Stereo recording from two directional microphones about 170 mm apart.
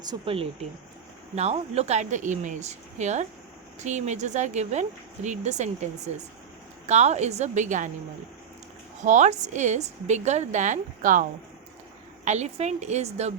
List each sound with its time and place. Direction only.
0.0 s a woman's voice: 30° right (ahead or behind); by 5.7 s 45° right (ahead or behind)
6.8 s a woman's voice: 40° right (ahead or behind)
9.0 s a woman's voice: 45° right (ahead or behind)